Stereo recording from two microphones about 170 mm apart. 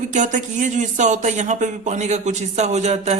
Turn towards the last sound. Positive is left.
turn(degrees=-40)  # may be behind; listen again after turning